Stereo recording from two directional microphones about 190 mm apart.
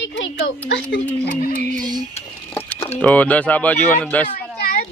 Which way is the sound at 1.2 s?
50° left (ahead or behind).